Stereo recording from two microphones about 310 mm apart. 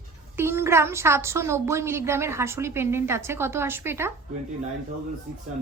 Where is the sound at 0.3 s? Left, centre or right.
Centre.